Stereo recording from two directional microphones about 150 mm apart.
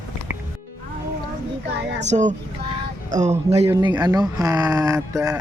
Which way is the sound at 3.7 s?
30° right (ahead or behind).